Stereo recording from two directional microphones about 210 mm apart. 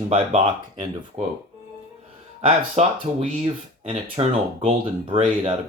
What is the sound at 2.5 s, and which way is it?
Speech, 30° right (ahead or behind).